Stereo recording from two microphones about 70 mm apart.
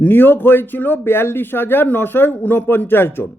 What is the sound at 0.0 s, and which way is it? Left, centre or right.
A man's voice, left.